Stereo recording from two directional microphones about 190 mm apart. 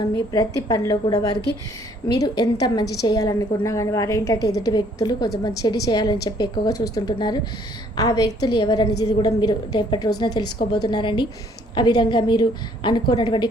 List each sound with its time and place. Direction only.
0.0 s a woman's voice: 15° left (ahead or behind)